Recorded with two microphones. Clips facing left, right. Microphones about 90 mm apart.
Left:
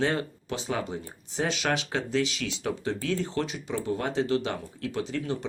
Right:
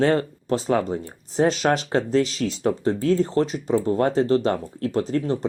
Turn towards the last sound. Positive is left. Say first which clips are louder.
# right 8 dB
turn(degrees=-40)  # may be behind; listen again after turning